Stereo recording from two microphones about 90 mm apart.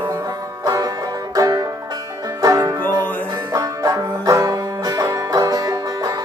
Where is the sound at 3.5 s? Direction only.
40° right (ahead or behind).